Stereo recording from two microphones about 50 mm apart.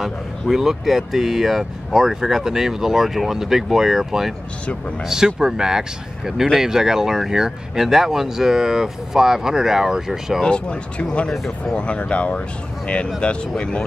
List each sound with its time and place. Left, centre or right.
0.0 s speech: centre
10.4 s speech: left